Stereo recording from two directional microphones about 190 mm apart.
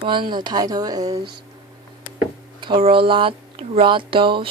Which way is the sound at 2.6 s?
30° right (ahead or behind).